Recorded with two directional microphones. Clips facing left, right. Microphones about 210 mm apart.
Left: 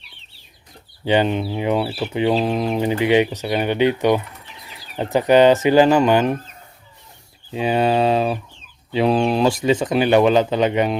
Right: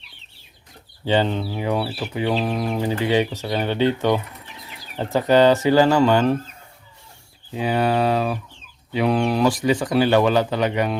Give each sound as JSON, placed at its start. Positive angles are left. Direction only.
{"t": 1.0, "sound": "speech", "side_deg": 15}
{"t": 7.5, "sound": "speech", "side_deg": 20}